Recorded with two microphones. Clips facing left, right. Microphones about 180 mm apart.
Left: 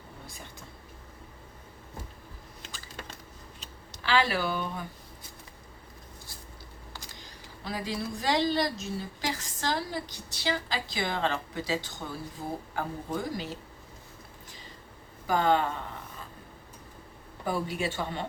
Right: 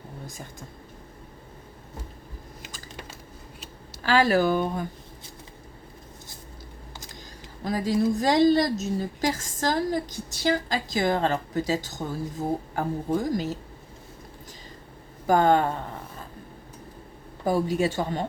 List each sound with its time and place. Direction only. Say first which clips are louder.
4.0 s a woman's voice: right 7 dB; 45° right (ahead or behind)
7.6 s a woman's voice: right 10 dB; 45° right (ahead or behind)
15.3 s a woman's voice: right 5 dB; 50° right (ahead or behind)
17.4 s speech: right 7 dB; 40° right (ahead or behind)